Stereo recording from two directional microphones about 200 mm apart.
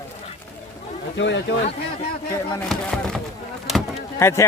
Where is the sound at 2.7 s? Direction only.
Centre (ahead or behind).